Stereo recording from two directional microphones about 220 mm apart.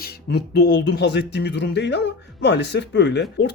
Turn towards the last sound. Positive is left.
turn(degrees=50)  # may be behind; listen again after turning